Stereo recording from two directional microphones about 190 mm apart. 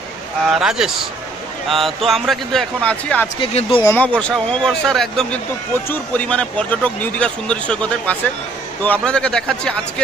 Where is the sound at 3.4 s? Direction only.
30° left (ahead or behind).